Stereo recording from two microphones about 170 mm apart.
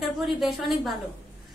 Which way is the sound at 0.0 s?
Centre (ahead or behind).